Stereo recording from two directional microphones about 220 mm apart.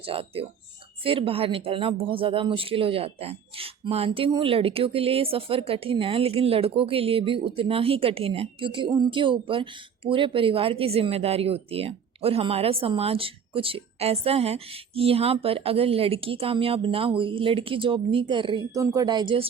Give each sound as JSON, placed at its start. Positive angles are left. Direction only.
{"t": 0.0, "sound": "speech", "side_deg": -25}